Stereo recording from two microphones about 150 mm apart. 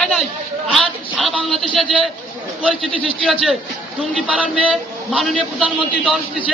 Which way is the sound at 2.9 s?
35° right (ahead or behind).